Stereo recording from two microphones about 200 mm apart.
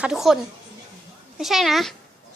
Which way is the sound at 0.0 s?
Centre (ahead or behind).